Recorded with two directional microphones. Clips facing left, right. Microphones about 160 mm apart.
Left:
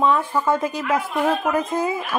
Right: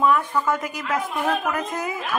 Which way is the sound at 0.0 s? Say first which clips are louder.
Left 1 dB; 30° left (ahead or behind).